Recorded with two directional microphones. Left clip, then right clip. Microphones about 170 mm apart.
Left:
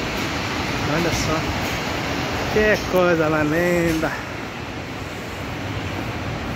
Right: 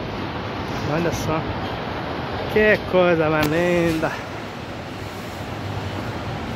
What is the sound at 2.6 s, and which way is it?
Speech, 20° right (ahead or behind).